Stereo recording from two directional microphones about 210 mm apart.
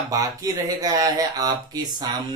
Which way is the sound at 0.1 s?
15° right (ahead or behind).